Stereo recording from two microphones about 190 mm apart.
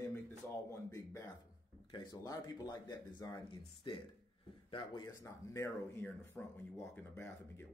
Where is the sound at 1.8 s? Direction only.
20° left (ahead or behind).